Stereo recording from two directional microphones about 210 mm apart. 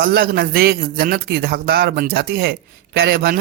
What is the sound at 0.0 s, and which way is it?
A man's voice, 45° right (ahead or behind).